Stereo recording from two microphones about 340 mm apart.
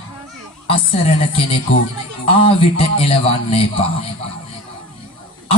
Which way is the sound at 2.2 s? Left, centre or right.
Centre.